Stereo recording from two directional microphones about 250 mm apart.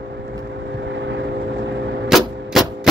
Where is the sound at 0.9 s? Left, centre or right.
Right.